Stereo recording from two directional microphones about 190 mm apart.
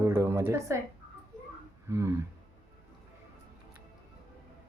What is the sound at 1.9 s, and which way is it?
Speech, 15° right (ahead or behind).